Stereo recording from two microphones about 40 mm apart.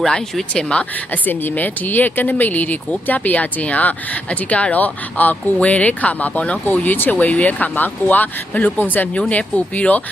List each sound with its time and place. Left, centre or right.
0.5 s speech: left
1.1 s speech: left
5.5 s speech: left
6.7 s speech: left